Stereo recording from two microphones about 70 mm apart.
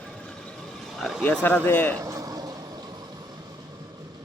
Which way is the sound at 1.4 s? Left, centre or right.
Left.